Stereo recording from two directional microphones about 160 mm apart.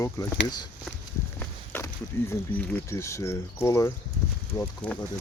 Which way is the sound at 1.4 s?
10° left (ahead or behind).